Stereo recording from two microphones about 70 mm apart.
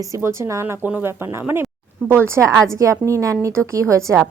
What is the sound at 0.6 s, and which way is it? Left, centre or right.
A woman's voice, right.